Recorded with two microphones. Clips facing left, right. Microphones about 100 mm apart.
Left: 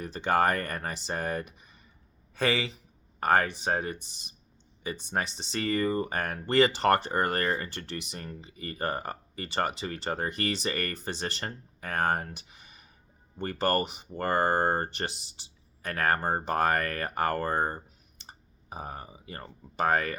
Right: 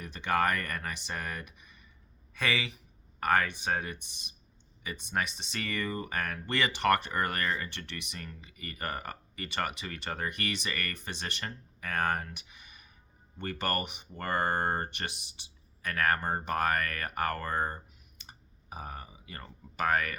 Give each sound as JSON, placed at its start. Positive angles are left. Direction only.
{"t": 0.0, "sound": "speech", "side_deg": 35}